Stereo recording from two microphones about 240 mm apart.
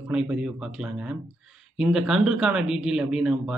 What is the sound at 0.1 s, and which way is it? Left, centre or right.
A man's voice, centre.